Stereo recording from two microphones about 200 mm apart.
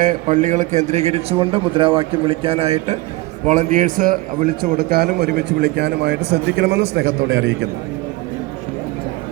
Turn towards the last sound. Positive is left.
turn(degrees=-80)